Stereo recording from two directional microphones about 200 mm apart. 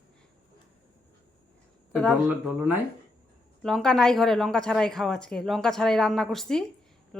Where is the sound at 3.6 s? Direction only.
Centre (ahead or behind).